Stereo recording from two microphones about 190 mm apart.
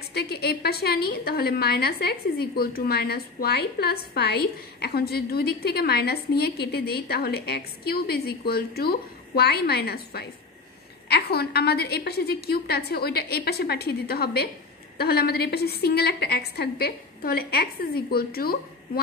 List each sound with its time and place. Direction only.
0.1 s a woman's voice: 55° left (ahead or behind)